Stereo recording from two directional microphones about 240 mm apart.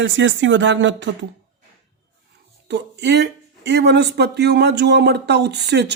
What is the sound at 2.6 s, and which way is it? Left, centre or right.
Speech, right.